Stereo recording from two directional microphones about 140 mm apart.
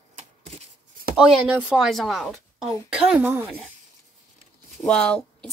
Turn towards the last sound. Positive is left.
turn(degrees=5)  # may be behind; listen again after turning